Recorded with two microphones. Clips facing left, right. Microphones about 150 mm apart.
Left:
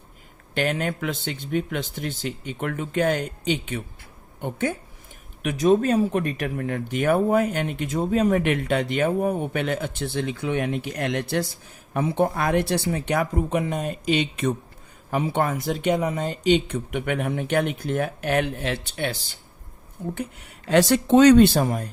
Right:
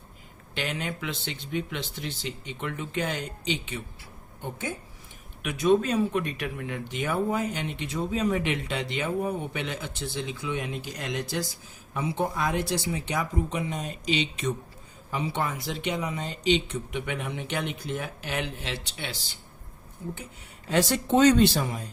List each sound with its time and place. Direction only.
0.5 s speech: 50° left (ahead or behind)
4.4 s a woman's voice: 70° left (ahead or behind)
5.4 s speech: 40° left (ahead or behind); by 20.1 s 60° left (ahead or behind)
20.7 s speech: 75° left (ahead or behind); by 21.8 s 50° left (ahead or behind)